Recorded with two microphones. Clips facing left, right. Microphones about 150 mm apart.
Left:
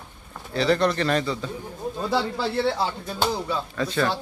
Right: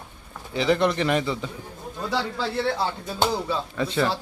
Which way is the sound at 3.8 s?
20° right (ahead or behind).